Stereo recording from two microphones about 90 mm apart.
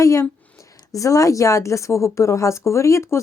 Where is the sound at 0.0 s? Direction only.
35° left (ahead or behind).